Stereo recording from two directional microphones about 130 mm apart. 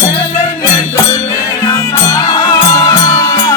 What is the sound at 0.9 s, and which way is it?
Music, 25° left (ahead or behind).